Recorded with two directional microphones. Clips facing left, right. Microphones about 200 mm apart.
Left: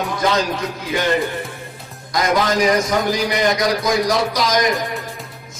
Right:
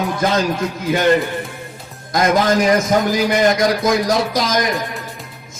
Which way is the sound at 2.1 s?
50° right (ahead or behind).